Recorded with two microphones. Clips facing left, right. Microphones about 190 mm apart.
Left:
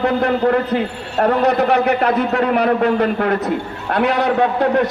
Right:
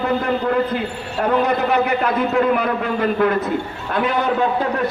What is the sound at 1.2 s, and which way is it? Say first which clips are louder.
A man's voice: left 3 dB; 70° left (ahead or behind).